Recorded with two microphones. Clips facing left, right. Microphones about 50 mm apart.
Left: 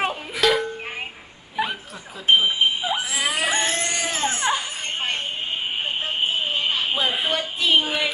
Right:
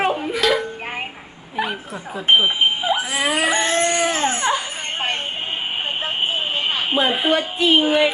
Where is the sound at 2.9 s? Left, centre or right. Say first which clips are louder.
Right 4 dB; right.